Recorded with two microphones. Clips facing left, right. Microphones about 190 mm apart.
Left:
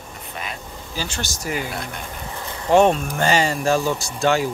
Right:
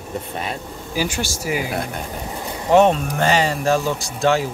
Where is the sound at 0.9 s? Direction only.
15° right (ahead or behind).